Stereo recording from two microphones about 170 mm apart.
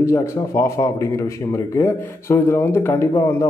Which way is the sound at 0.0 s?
15° left (ahead or behind).